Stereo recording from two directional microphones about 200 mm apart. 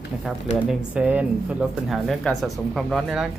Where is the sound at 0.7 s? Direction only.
5° right (ahead or behind).